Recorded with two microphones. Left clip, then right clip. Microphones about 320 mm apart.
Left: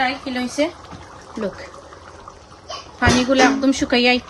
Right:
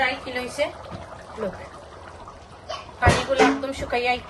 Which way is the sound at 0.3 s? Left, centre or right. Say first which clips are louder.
Left 4 dB; left.